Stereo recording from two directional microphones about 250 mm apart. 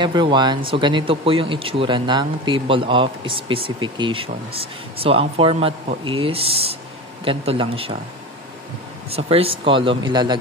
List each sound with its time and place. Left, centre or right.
0.0 s speech: centre
9.1 s speech: right